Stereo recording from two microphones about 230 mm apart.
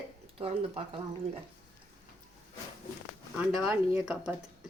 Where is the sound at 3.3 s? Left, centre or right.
Centre.